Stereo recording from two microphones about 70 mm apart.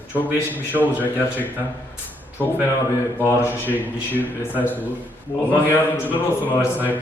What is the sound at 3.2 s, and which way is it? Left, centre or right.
A man's voice, left.